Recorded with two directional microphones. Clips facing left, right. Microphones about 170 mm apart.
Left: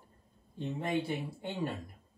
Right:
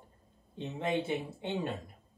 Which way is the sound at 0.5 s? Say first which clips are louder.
Right 1 dB; 20° right (ahead or behind).